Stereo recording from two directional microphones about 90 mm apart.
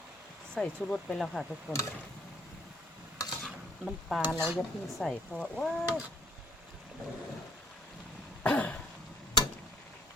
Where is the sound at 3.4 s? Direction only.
Centre (ahead or behind).